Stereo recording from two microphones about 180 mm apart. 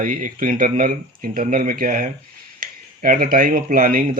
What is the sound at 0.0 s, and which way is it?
Speech, 50° right (ahead or behind).